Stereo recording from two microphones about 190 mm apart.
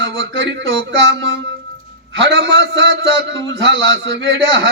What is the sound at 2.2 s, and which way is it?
A man's voice, 75° right (ahead or behind).